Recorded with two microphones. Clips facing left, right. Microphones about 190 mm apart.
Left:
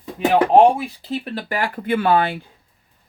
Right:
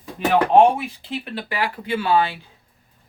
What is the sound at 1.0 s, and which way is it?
Speech, 40° left (ahead or behind).